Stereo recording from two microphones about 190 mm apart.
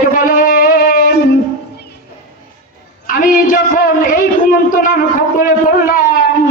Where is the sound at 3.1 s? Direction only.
45° left (ahead or behind).